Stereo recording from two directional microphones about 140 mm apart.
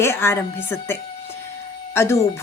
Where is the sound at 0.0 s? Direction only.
20° left (ahead or behind).